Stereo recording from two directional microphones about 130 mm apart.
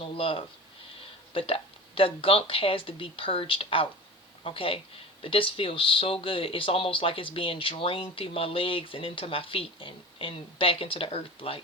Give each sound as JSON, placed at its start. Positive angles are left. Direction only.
{"t": 0.0, "sound": "speech", "side_deg": 45}